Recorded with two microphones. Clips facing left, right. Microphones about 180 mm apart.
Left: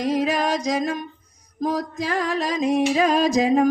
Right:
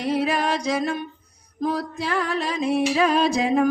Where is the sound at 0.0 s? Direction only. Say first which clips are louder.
Left 1 dB; 40° left (ahead or behind).